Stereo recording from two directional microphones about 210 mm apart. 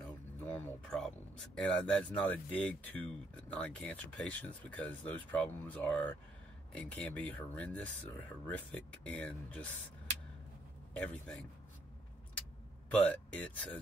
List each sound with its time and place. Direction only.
0.0 s speech: 10° left (ahead or behind)
10.9 s a man's voice: 5° left (ahead or behind)
12.9 s speech: 5° left (ahead or behind)